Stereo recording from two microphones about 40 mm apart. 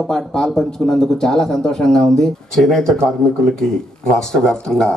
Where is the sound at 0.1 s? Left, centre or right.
Centre.